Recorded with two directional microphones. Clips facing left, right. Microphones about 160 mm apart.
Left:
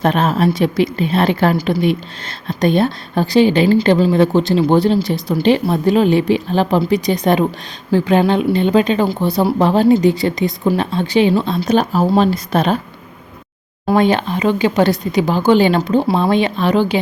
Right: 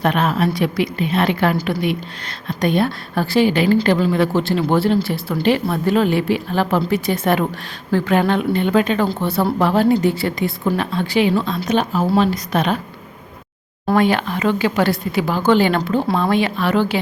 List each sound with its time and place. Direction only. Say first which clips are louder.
0.0 s a woman's voice: left 3 dB; 30° left (ahead or behind)
4.2 s a woman's voice: left 4 dB; 20° left (ahead or behind)
13.9 s speech: left 2 dB; 25° left (ahead or behind)